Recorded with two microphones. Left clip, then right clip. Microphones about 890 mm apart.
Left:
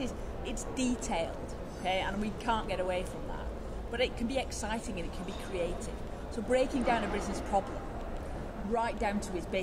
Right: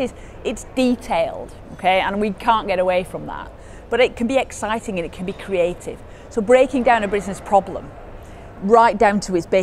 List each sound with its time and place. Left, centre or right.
0.4 s speech: right
8.7 s speech: right